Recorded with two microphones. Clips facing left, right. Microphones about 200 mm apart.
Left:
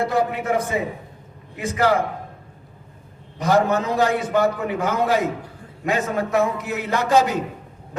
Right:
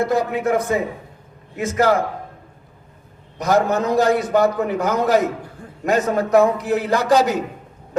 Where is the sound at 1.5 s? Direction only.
45° right (ahead or behind).